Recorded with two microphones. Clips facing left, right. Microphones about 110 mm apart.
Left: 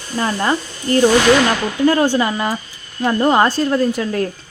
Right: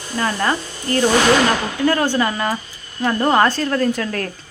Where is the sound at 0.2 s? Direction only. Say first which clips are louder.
Left 1 dB; 20° left (ahead or behind).